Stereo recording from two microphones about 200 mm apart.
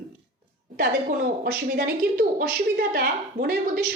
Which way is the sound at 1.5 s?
50° right (ahead or behind).